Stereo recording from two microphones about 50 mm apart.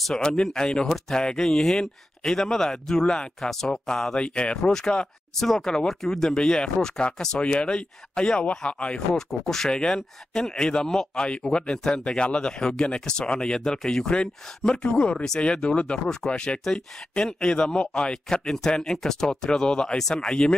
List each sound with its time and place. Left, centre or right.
0.2 s speech: centre
9.1 s speech: centre